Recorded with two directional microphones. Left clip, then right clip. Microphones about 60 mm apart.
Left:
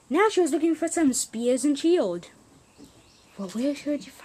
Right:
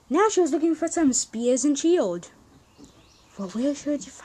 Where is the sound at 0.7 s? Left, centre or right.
Centre.